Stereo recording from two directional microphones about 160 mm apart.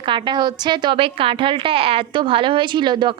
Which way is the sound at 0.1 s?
30° right (ahead or behind).